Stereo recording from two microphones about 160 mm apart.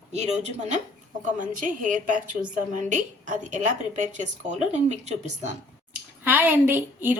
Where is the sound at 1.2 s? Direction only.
55° right (ahead or behind).